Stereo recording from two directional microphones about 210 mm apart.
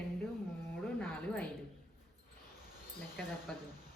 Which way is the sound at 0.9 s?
5° left (ahead or behind).